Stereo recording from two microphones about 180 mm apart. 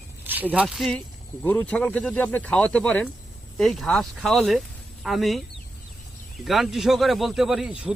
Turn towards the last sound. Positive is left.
turn(degrees=-5)  # may be behind; listen again after turning